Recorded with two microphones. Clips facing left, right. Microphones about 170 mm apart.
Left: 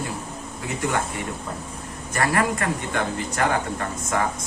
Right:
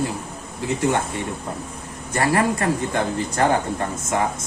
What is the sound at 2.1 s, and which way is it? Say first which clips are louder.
A man's voice: right 3 dB; 25° right (ahead or behind).